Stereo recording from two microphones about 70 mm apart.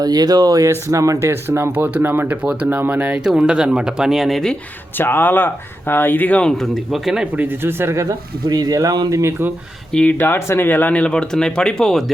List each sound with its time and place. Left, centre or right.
0.0 s speech: right
0.7 s speech: right
1.3 s speech: right
1.7 s speech: right
2.6 s speech: right; by 4.5 s centre
4.9 s speech: left
6.4 s speech: centre
7.3 s speech: right
8.4 s speech: right
9.9 s speech: centre
10.2 s speech: left; by 12.1 s centre